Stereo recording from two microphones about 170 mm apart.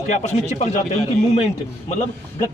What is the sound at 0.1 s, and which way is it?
Speech, 40° left (ahead or behind).